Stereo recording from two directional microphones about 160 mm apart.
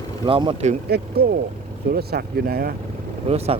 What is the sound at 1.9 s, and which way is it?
Speech, 80° right.